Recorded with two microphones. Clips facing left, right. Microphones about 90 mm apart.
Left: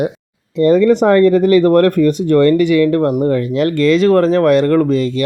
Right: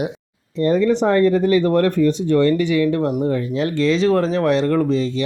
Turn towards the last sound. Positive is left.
turn(degrees=60)  # may be behind; listen again after turning